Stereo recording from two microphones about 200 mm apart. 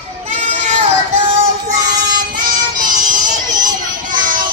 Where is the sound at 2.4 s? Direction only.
45° right (ahead or behind).